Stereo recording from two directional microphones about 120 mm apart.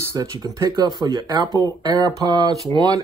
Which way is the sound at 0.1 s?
30° right (ahead or behind).